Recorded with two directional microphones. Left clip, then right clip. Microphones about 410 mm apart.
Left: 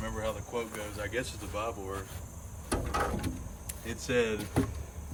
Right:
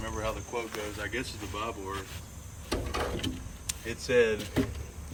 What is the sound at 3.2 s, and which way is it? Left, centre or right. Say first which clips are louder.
Vehicle: right 5 dB; centre.